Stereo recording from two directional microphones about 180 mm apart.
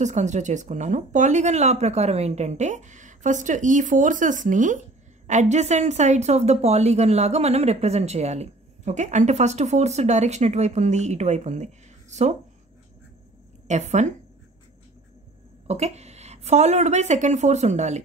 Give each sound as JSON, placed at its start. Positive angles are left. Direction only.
{"t": 0.0, "sound": "speech", "side_deg": -40}
{"t": 13.7, "sound": "speech", "side_deg": -40}
{"t": 15.6, "sound": "speech", "side_deg": -35}